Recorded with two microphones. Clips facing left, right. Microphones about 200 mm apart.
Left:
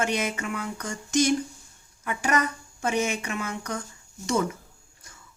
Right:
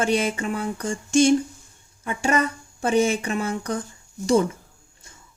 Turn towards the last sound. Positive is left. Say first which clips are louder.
# right 6 dB
turn(degrees=-30)  # may be behind; listen again after turning